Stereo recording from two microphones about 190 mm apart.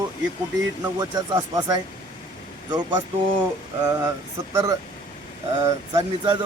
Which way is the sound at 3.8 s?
15° right (ahead or behind).